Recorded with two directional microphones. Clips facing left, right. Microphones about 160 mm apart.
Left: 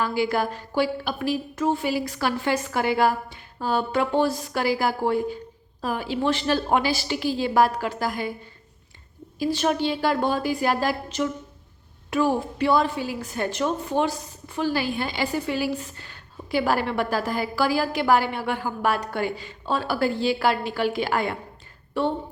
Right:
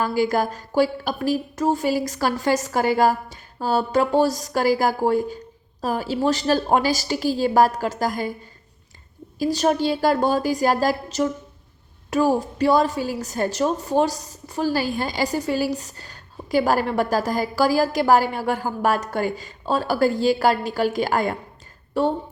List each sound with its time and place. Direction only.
0.0 s a woman's voice: 40° right (ahead or behind)
9.4 s a woman's voice: 40° right (ahead or behind)